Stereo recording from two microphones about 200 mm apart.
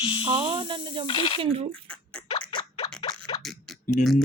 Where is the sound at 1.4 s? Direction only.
25° right (ahead or behind).